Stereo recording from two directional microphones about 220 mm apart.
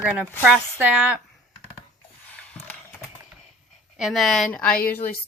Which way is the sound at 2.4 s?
5° left (ahead or behind).